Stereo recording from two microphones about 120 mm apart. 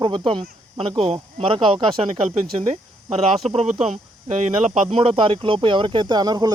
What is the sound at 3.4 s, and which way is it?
Speech, 65° right (ahead or behind).